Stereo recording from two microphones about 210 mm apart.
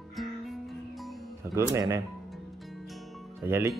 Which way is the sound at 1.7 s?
15° right (ahead or behind).